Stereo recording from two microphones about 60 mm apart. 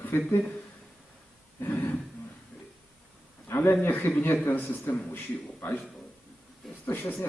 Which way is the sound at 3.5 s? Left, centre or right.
Left.